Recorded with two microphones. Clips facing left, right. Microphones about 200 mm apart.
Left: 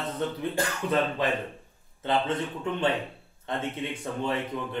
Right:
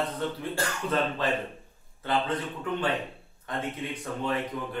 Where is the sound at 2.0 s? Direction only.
25° left (ahead or behind).